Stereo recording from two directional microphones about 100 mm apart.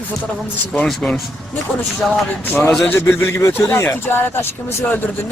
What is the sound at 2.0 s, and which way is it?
Speech, 5° left (ahead or behind).